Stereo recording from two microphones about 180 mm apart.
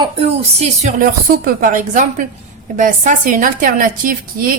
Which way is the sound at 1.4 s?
50° right (ahead or behind).